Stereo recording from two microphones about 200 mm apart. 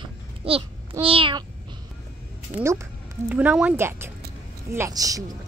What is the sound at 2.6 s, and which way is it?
Speech, 15° right (ahead or behind).